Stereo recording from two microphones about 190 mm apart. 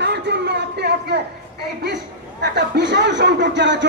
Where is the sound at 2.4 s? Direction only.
65° right (ahead or behind).